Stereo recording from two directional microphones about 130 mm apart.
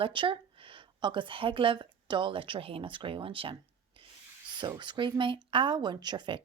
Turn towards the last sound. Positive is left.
turn(degrees=-35)  # may be behind; listen again after turning